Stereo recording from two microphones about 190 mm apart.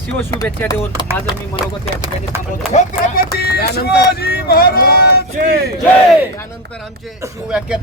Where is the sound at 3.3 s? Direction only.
55° left (ahead or behind).